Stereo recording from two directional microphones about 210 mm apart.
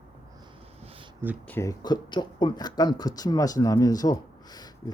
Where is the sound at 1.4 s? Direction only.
10° left (ahead or behind).